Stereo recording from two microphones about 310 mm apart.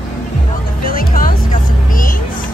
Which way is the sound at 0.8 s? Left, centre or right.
Left.